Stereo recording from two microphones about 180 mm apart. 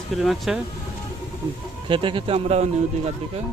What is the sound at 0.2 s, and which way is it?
Speech, centre (ahead or behind).